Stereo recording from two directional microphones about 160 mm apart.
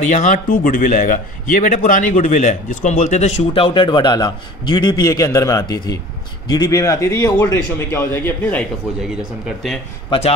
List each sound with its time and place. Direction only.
0.0 s a man's voice: 50° left (ahead or behind); by 8.6 s 10° left (ahead or behind)